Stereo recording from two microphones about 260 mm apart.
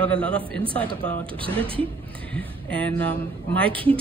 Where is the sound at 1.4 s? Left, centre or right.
Centre.